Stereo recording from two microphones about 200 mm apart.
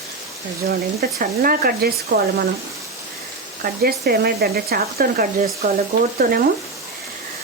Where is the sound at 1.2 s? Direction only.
45° right (ahead or behind).